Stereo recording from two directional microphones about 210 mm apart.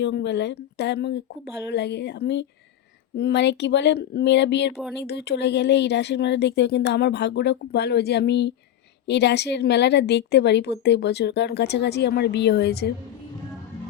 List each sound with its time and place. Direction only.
0.0 s a woman's voice: 55° left (ahead or behind)